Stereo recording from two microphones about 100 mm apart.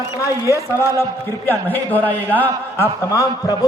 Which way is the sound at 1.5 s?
20° left (ahead or behind).